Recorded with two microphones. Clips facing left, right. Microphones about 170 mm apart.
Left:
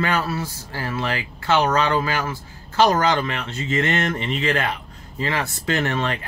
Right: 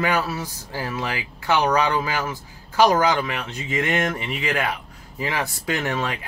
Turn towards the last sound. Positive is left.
turn(degrees=-10)  # may be behind; listen again after turning